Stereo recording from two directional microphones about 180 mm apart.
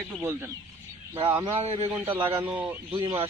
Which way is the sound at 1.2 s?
25° right (ahead or behind).